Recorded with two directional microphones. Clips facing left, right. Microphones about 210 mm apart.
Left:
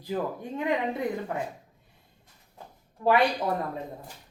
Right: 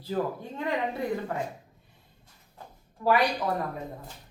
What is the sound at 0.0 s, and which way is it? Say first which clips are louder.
Speech: right 1 dB; 15° left (ahead or behind).